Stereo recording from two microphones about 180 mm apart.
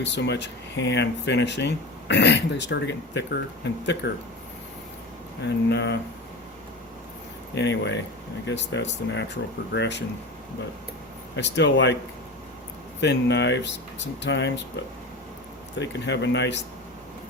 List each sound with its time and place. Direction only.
0.0 s speech: 70° left (ahead or behind)
5.4 s speech: 70° left (ahead or behind)
7.5 s speech: 75° left (ahead or behind)
11.3 s speech: 75° left (ahead or behind)
13.0 s speech: 75° left (ahead or behind)
15.8 s speech: 75° left (ahead or behind)